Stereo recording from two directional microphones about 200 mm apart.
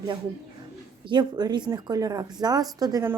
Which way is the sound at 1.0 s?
20° right (ahead or behind).